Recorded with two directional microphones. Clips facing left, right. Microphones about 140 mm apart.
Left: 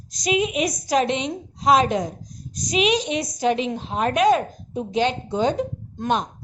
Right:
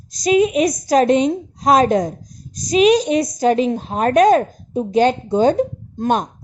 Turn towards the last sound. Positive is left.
turn(degrees=-45)  # may be behind; listen again after turning